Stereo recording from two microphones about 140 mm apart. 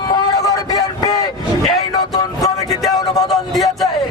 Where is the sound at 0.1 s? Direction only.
25° left (ahead or behind).